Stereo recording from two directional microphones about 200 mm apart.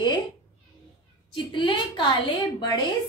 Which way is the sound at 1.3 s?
25° left (ahead or behind).